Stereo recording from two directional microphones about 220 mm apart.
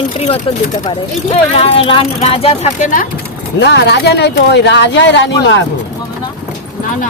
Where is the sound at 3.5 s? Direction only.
50° left (ahead or behind).